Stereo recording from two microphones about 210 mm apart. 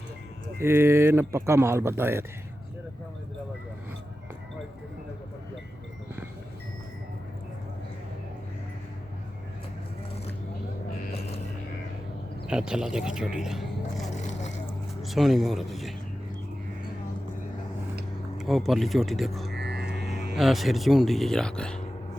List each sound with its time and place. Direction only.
0.6 s speech: 10° right (ahead or behind)
11.1 s music: 30° left (ahead or behind)
12.5 s speech: 5° right (ahead or behind)
14.2 s vehicle: 35° left (ahead or behind)
15.0 s speech: centre (ahead or behind)
18.3 s speech: centre (ahead or behind)
19.5 s a sound: 50° right (ahead or behind)
20.3 s speech: centre (ahead or behind)